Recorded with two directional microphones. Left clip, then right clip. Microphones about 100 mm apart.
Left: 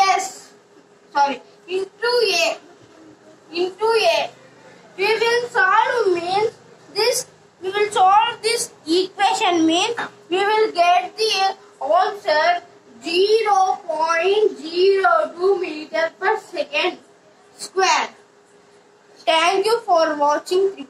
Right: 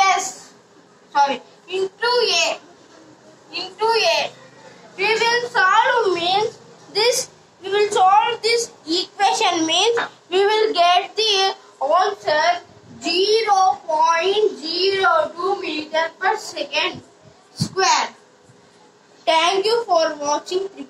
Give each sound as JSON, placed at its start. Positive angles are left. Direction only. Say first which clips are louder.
{"t": 0.0, "sound": "a sound", "louder": "even", "side_deg": -40}
{"t": 1.1, "sound": "child singing", "louder": "right 1 dB", "side_deg": -40}
{"t": 3.5, "sound": "a sound", "louder": "left 1 dB", "side_deg": -40}
{"t": 7.6, "sound": "a woman's voice", "louder": "even", "side_deg": -35}
{"t": 9.1, "sound": "a child's voice", "louder": "right 3 dB", "side_deg": -35}
{"t": 11.8, "sound": "a woman's voice", "louder": "even", "side_deg": -40}
{"t": 19.4, "sound": "a woman's voice", "louder": "even", "side_deg": -40}